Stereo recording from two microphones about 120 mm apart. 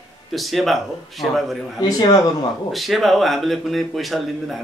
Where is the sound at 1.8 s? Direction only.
35° left (ahead or behind).